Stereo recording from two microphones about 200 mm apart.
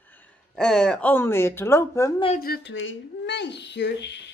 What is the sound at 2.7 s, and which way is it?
Speech, 70° left (ahead or behind).